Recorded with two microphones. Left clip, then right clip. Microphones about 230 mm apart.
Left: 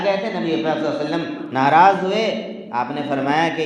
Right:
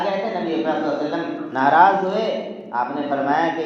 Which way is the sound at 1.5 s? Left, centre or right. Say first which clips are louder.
Left 1 dB; left.